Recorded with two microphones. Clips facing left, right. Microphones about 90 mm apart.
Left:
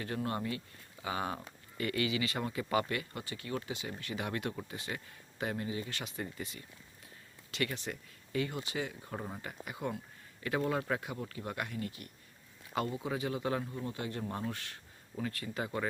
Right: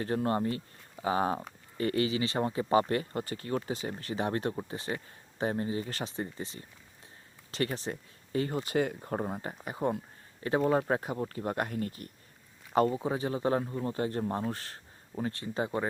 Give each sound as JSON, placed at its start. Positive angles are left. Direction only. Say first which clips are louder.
{"t": 0.0, "sound": "speech", "louder": "right 7 dB", "side_deg": -35}